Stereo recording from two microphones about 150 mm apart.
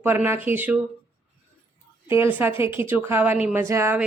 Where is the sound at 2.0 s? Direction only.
15° right (ahead or behind).